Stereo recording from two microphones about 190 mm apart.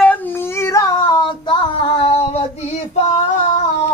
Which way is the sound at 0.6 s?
15° left (ahead or behind).